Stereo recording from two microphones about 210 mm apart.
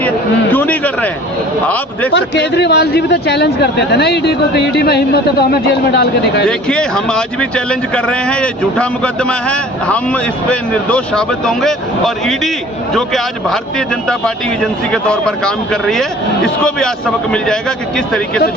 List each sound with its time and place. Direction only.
0.5 s a sound: 5° left (ahead or behind)
1.6 s a man's voice: 5° left (ahead or behind)
2.1 s a man's voice: 55° left (ahead or behind)
6.4 s speech: 5° left (ahead or behind)
17.3 s speech: 5° left (ahead or behind)